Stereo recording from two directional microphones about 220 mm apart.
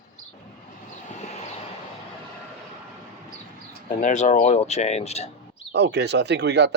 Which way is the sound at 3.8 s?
35° left (ahead or behind).